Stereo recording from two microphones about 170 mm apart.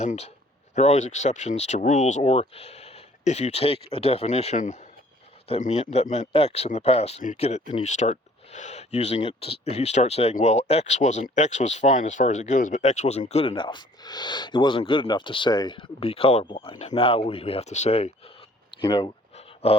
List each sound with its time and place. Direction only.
0.0 s speech: 40° left (ahead or behind)